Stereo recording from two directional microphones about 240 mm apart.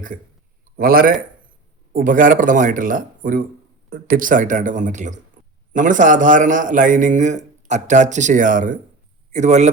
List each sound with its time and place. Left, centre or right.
0.8 s a man's voice: right